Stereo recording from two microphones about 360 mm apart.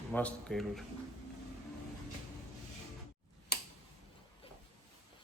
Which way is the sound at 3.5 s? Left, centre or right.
Left.